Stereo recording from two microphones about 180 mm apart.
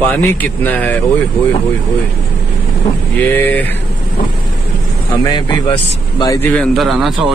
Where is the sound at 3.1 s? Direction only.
10° left (ahead or behind).